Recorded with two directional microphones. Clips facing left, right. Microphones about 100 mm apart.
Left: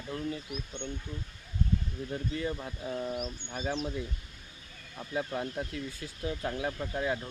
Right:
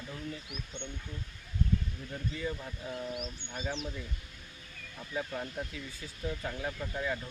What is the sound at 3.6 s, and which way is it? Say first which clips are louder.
Speech: left 4 dB; 45° left (ahead or behind).